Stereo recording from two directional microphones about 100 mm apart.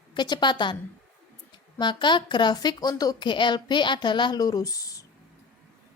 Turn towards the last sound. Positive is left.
turn(degrees=35)  # may be behind; listen again after turning